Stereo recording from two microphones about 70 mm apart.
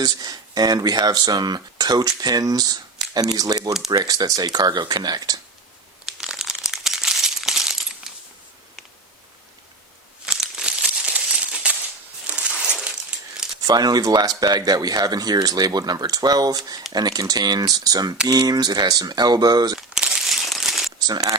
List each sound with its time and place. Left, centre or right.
0.0 s speech: right
6.1 s a sound: centre
10.2 s crumpling: centre
12.3 s a sound: centre
13.7 s speech: right
19.9 s crumpling: centre
21.1 s speech: right